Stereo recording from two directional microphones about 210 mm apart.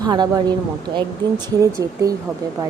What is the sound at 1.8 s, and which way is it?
Speech, 15° right (ahead or behind).